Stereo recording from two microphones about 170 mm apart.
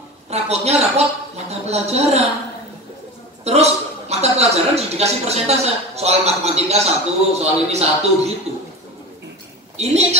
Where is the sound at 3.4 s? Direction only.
40° right (ahead or behind).